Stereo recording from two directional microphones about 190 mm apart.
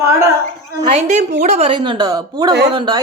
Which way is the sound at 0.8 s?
35° right (ahead or behind).